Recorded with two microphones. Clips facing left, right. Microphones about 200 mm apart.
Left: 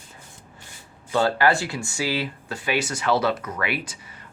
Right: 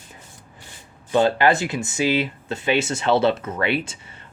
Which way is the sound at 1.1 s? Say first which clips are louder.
Right 3 dB; 20° right (ahead or behind).